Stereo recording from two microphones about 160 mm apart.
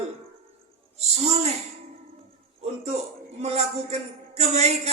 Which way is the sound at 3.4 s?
40° right (ahead or behind).